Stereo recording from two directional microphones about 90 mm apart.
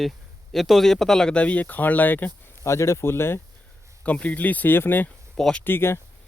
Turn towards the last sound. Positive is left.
turn(degrees=25)  # may be behind; listen again after turning